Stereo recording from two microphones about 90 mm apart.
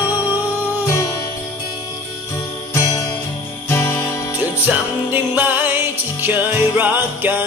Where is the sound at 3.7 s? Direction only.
25° left (ahead or behind).